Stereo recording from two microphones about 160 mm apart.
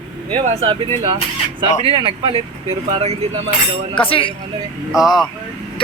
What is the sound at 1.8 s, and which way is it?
Speech, 35° right (ahead or behind).